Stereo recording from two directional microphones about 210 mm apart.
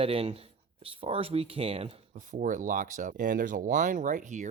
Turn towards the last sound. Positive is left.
turn(degrees=-35)  # may be behind; listen again after turning